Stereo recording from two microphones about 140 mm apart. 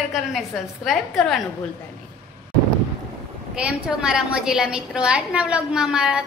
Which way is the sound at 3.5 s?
5° right (ahead or behind).